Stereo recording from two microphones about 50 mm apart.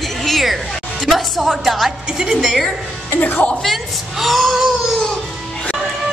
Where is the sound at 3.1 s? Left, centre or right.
Left.